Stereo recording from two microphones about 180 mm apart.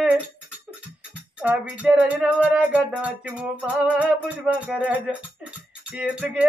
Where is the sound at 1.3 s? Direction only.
5° right (ahead or behind).